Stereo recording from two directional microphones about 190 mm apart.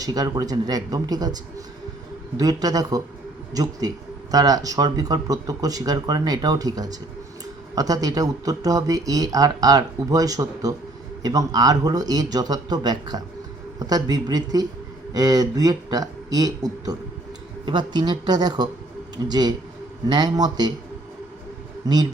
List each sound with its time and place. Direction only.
0.0 s speech: 20° right (ahead or behind)
21.8 s speech: 20° right (ahead or behind)